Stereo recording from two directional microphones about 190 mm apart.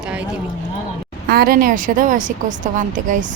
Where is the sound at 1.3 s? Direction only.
50° right (ahead or behind).